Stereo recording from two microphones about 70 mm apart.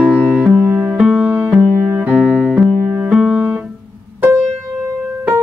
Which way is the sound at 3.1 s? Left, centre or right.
Centre.